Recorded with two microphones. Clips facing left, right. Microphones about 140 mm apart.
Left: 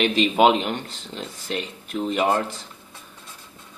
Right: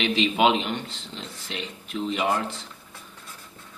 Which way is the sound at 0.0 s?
45° left (ahead or behind).